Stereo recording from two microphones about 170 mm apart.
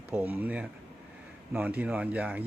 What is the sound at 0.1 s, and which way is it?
Speech, 10° right (ahead or behind).